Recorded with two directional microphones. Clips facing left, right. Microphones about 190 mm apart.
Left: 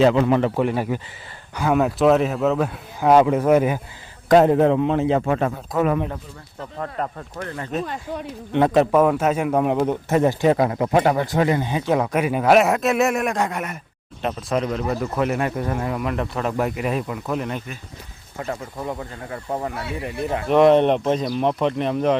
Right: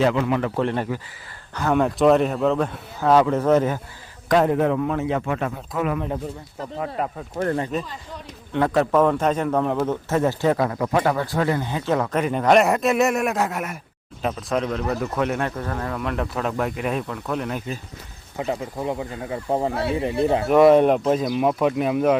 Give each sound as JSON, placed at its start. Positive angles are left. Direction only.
{"t": 0.0, "sound": "a man's voice", "side_deg": 30}
{"t": 0.5, "sound": "a man's voice", "side_deg": 10}
{"t": 4.3, "sound": "a man's voice", "side_deg": 30}
{"t": 6.7, "sound": "speech", "side_deg": -5}
{"t": 8.5, "sound": "a man's voice", "side_deg": 20}
{"t": 18.3, "sound": "speech", "side_deg": -20}
{"t": 20.5, "sound": "speech", "side_deg": -5}